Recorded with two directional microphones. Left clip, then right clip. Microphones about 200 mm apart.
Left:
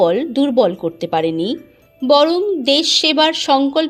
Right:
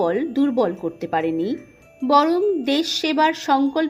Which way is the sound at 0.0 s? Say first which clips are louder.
Left 6 dB; 25° left (ahead or behind).